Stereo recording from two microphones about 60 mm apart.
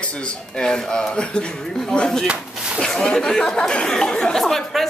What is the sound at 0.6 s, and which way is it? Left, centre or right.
Speech, centre.